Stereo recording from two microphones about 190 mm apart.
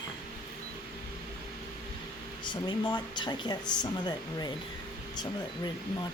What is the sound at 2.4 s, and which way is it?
A woman's voice, 25° left (ahead or behind).